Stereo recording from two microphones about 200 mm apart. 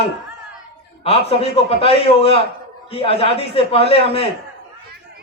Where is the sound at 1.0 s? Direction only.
30° left (ahead or behind).